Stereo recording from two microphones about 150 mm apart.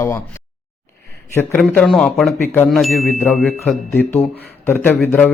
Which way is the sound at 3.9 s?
15° left (ahead or behind).